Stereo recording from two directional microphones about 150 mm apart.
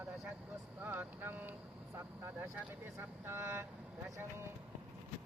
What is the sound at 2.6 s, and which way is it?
Speech, 15° right (ahead or behind).